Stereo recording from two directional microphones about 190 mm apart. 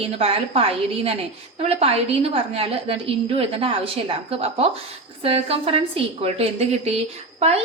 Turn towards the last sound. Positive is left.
turn(degrees=-35)  # may be behind; listen again after turning